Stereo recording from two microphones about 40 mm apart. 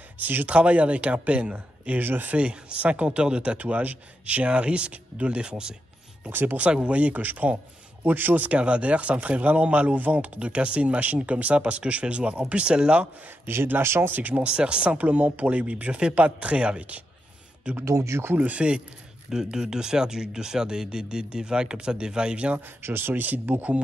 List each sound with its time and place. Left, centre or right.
0.2 s speech: right
0.5 s speech: right
2.0 s speech: right
2.3 s speech: right
3.5 s speech: right
4.5 s speech: right
5.5 s speech: centre
6.3 s a man's voice: right
8.5 s speech: right
13.5 s speech: right
14.1 s speech: right
19.3 s speech: centre
22.8 s speech: right
23.2 s a man's voice: right